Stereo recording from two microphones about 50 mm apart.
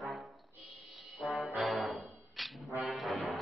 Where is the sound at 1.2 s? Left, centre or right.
Centre.